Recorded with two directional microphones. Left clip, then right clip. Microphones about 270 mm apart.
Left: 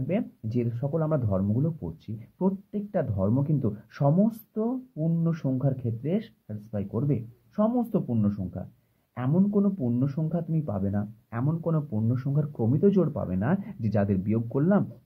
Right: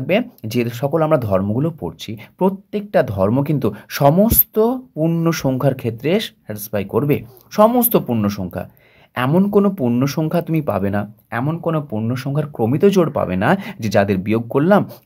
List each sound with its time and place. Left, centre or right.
0.0 s speech: centre